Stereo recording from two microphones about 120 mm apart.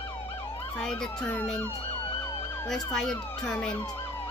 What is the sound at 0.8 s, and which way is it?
Speech, 5° left (ahead or behind).